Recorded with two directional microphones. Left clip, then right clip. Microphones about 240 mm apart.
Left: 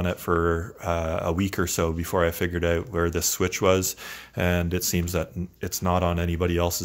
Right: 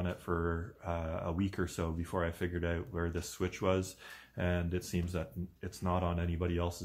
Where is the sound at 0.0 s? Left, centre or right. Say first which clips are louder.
Left 12 dB; left.